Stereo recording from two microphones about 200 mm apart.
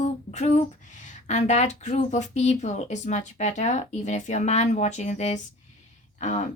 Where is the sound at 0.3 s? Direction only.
35° left (ahead or behind).